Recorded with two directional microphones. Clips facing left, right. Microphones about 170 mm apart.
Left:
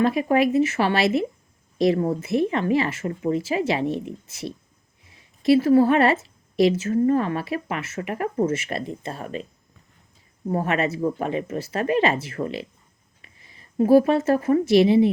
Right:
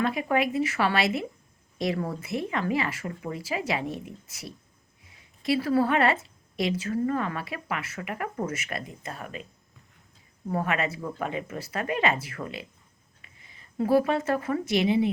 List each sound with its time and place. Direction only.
0.0 s a woman's voice: 25° left (ahead or behind)
10.5 s a woman's voice: 25° left (ahead or behind)
13.7 s a woman's voice: 25° left (ahead or behind)